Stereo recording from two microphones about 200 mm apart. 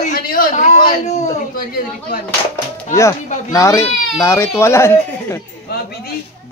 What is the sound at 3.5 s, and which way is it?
Speech, 15° left (ahead or behind).